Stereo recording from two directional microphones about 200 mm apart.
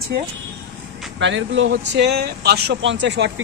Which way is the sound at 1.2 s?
65° right (ahead or behind).